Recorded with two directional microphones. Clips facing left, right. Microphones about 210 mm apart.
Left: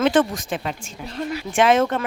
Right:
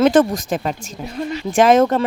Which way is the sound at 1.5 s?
40° right (ahead or behind).